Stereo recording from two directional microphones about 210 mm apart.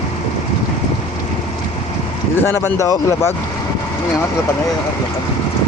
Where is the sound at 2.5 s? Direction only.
15° left (ahead or behind).